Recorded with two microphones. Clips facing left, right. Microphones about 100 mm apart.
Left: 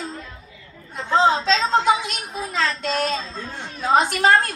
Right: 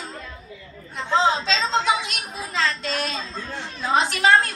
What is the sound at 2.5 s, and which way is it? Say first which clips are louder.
Child singing: left 2 dB; 45° left (ahead or behind).